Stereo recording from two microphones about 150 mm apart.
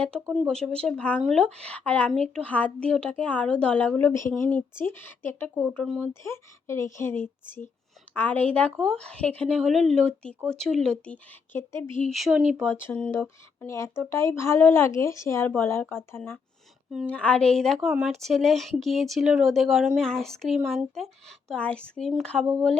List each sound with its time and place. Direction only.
0.3 s speech: 5° right (ahead or behind)
0.5 s speech: 5° left (ahead or behind)
6.2 s speech: 20° left (ahead or behind)
12.1 s speech: centre (ahead or behind)
12.6 s speech: 15° left (ahead or behind)